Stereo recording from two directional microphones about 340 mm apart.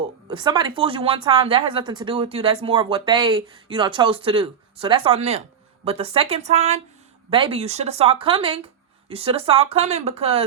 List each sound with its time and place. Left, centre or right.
0.3 s speech: centre